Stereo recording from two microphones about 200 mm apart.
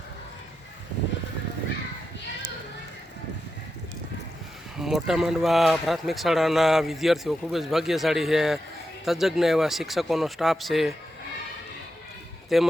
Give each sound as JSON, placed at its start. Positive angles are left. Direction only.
{"t": 4.8, "sound": "speech", "side_deg": 0}
{"t": 12.5, "sound": "speech", "side_deg": 0}